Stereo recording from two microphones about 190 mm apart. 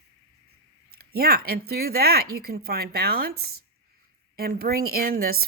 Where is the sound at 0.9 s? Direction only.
55° right (ahead or behind).